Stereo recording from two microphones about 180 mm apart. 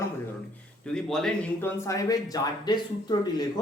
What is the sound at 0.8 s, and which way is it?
A man's voice, 5° left (ahead or behind).